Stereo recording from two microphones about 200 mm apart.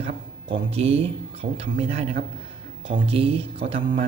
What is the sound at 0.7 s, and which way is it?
Speech, 30° right (ahead or behind).